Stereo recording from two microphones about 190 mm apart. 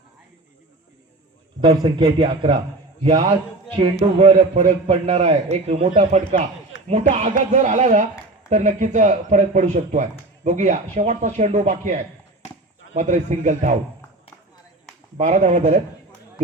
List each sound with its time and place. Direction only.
1.6 s a man's voice: 25° right (ahead or behind)
4.0 s speech: 30° right (ahead or behind)
15.2 s speech: 40° right (ahead or behind)